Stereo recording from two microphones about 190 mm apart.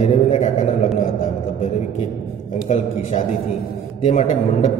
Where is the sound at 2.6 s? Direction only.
35° left (ahead or behind).